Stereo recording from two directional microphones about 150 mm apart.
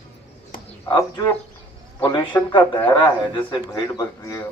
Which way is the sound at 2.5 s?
30° left (ahead or behind).